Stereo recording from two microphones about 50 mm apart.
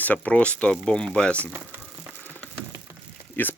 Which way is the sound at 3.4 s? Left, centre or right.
Left.